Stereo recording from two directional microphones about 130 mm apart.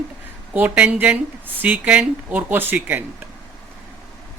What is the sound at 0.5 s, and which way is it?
Speech, 10° right (ahead or behind).